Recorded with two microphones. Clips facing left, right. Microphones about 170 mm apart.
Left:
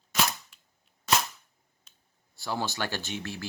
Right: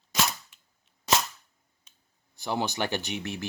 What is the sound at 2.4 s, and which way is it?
Speech, 20° right (ahead or behind).